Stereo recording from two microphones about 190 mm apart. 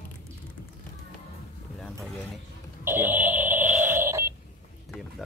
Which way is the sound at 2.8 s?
10° right (ahead or behind).